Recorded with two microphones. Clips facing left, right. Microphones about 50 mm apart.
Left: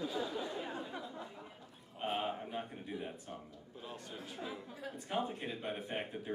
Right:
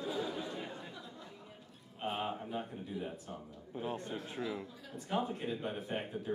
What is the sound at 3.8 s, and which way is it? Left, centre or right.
Speech, right.